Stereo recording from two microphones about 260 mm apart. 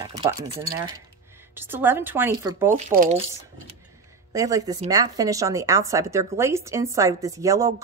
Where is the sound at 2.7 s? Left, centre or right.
Right.